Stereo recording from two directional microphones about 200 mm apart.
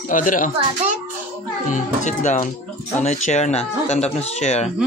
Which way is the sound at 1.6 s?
40° left (ahead or behind).